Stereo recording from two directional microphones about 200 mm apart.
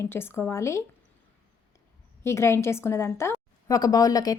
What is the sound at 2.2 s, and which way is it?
A woman's voice, 15° left (ahead or behind).